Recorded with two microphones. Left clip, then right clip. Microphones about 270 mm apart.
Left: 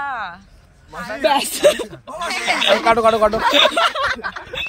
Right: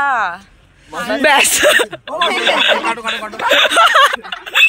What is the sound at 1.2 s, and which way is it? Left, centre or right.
Speech, centre.